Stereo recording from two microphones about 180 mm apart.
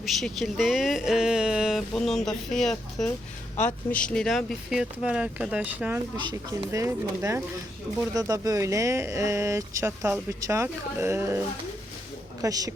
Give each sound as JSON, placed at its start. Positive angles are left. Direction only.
{"t": 0.0, "sound": "speech", "side_deg": 0}
{"t": 6.1, "sound": "speech", "side_deg": -25}